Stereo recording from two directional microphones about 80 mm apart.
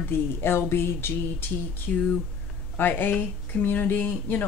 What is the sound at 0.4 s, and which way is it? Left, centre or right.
Speech, left.